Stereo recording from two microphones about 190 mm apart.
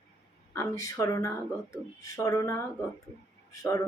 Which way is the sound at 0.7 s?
15° left (ahead or behind).